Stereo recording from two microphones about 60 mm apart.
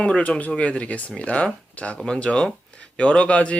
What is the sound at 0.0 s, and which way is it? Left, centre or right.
Speech, centre.